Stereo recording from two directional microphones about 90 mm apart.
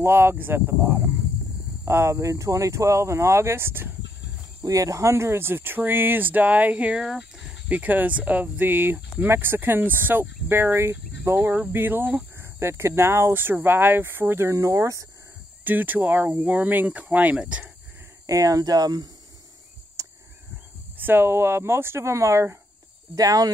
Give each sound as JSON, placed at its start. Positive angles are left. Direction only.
{"t": 0.0, "sound": "speech", "side_deg": -25}
{"t": 4.6, "sound": "speech", "side_deg": -40}
{"t": 7.6, "sound": "speech", "side_deg": -15}
{"t": 15.6, "sound": "speech", "side_deg": -20}
{"t": 18.2, "sound": "speech", "side_deg": -40}
{"t": 20.0, "sound": "a sound", "side_deg": -40}
{"t": 21.0, "sound": "speech", "side_deg": -25}